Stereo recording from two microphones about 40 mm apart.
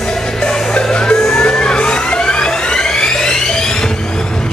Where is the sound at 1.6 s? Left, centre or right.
Left.